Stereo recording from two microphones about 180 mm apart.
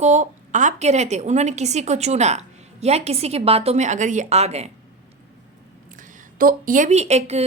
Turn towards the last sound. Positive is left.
turn(degrees=-35)  # may be behind; listen again after turning